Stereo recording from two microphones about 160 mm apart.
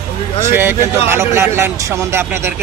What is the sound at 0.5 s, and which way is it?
Speech, 15° right (ahead or behind).